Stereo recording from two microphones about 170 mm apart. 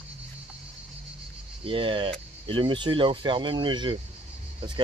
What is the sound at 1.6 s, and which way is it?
Speech, 30° right (ahead or behind).